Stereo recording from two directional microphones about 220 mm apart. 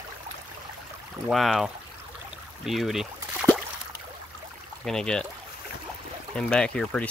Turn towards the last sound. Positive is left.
turn(degrees=5)  # may be behind; listen again after turning